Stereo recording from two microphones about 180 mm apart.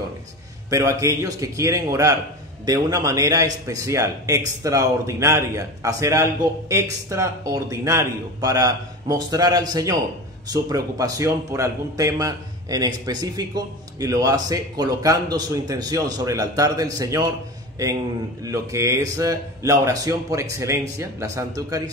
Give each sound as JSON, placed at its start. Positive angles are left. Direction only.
{"t": 0.7, "sound": "a man's voice", "side_deg": -15}
{"t": 18.4, "sound": "a man's voice", "side_deg": -15}